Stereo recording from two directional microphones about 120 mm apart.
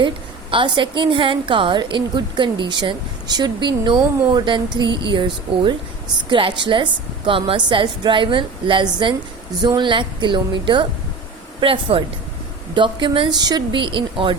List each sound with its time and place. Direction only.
0.5 s a woman's voice: 45° right (ahead or behind)